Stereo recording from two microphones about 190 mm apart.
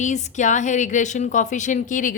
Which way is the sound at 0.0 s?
40° left (ahead or behind).